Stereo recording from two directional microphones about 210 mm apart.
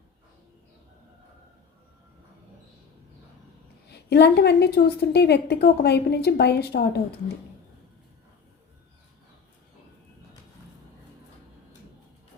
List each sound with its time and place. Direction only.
3.8 s a woman's voice: 55° left (ahead or behind)